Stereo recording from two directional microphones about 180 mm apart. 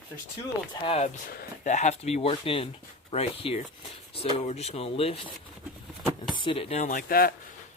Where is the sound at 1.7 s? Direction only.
40° left (ahead or behind).